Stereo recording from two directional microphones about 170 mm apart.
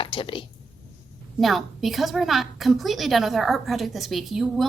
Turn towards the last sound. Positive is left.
turn(degrees=0)  # may be behind; listen again after turning